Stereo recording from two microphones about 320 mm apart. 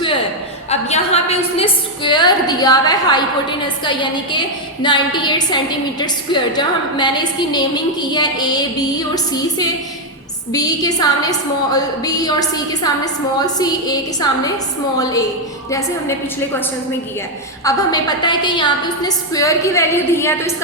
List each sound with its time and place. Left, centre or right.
0.7 s a woman's voice: centre
17.6 s a woman's voice: centre